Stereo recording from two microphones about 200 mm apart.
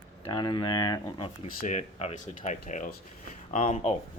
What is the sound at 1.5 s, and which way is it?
Speech, 35° left (ahead or behind).